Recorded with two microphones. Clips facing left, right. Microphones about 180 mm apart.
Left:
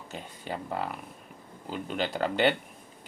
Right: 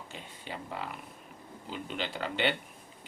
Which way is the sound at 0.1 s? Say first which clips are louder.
Left 8 dB; 45° left (ahead or behind).